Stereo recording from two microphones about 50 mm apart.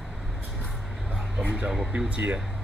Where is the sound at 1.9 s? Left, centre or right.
Right.